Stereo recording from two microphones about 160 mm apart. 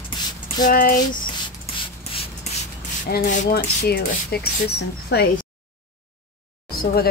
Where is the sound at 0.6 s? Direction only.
60° left (ahead or behind).